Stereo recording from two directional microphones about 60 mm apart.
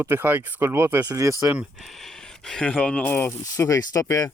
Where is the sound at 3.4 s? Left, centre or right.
Left.